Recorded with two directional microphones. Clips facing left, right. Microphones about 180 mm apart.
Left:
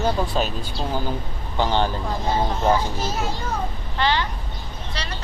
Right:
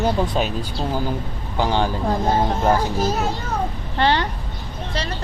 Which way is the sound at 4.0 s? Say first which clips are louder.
Right 3 dB; 55° right (ahead or behind).